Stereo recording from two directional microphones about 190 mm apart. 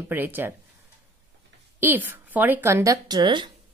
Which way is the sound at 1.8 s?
10° right (ahead or behind).